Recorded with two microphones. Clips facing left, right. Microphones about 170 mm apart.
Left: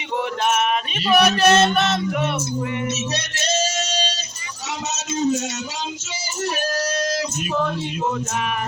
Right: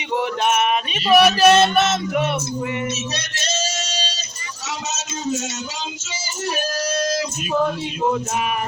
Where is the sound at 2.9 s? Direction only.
60° left (ahead or behind).